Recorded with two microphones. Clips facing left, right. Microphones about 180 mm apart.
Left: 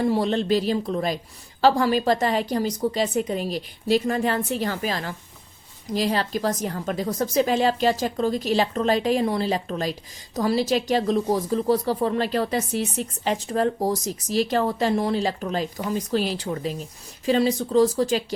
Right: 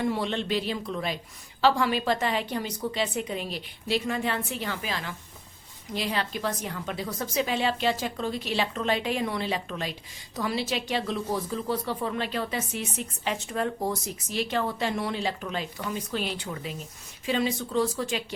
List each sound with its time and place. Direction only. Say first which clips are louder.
0.0 s speech: left 6 dB; 35° left (ahead or behind)